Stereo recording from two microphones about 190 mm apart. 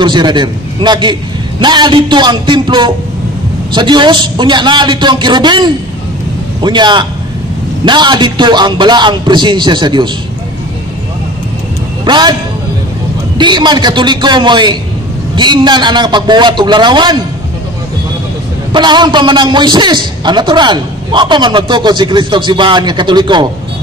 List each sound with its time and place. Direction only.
0.0 s a man's voice: 25° right (ahead or behind)
12.0 s a man's voice: 20° right (ahead or behind)
13.4 s a man's voice: 25° right (ahead or behind)
18.7 s a man's voice: 25° right (ahead or behind)